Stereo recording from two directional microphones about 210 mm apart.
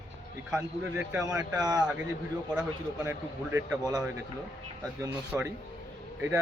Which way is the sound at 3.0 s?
10° right (ahead or behind).